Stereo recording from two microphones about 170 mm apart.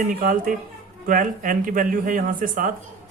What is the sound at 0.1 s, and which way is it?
Speech, 55° right (ahead or behind).